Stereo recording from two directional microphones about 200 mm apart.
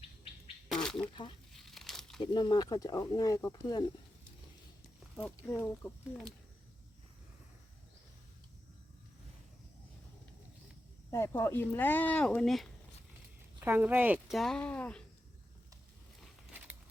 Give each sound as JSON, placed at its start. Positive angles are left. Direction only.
{"t": 0.7, "sound": "a sound", "side_deg": 5}
{"t": 1.1, "sound": "speech", "side_deg": 25}
{"t": 1.5, "sound": "crumpling", "side_deg": 0}
{"t": 2.2, "sound": "speech", "side_deg": 20}
{"t": 5.1, "sound": "speech", "side_deg": 0}
{"t": 5.5, "sound": "speech", "side_deg": 10}
{"t": 11.1, "sound": "speech", "side_deg": 15}
{"t": 13.6, "sound": "a woman's voice", "side_deg": -10}
{"t": 16.2, "sound": "a sound", "side_deg": -10}